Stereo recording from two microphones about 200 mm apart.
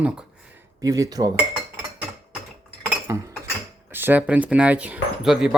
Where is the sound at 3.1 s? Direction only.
15° right (ahead or behind).